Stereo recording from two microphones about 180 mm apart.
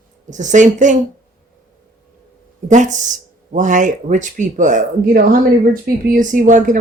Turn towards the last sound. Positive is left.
turn(degrees=-45)  # may be behind; listen again after turning